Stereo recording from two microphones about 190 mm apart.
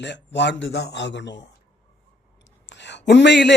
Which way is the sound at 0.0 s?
65° left (ahead or behind).